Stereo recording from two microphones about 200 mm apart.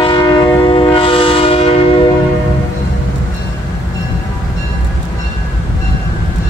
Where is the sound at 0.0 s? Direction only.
20° left (ahead or behind).